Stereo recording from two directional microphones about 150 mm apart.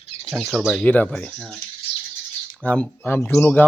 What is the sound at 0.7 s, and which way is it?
Speech, 10° left (ahead or behind).